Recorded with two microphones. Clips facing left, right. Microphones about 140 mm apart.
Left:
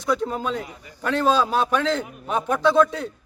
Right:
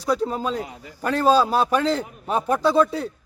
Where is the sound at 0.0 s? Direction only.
35° right (ahead or behind).